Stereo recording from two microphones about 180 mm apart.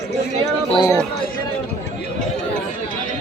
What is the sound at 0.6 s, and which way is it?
Speech, 25° left (ahead or behind).